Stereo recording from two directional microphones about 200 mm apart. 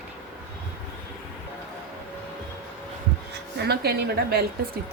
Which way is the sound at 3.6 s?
50° right (ahead or behind).